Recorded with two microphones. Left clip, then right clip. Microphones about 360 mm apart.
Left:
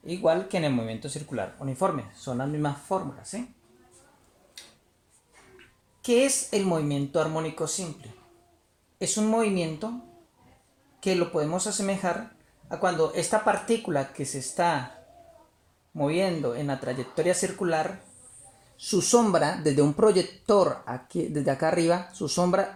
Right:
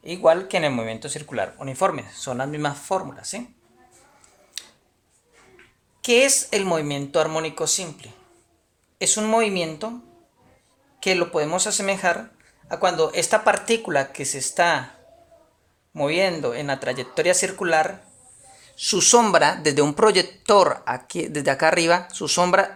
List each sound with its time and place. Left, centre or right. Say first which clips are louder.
0.1 s speech: right 6 dB; right
0.9 s speech: right 5 dB; right
1.3 s speech: right 6 dB; right
6.0 s a woman's voice: right 6 dB; right
9.0 s speech: right 6 dB; right
11.5 s speech: right 6 dB; right
16.0 s speech: right 5 dB; right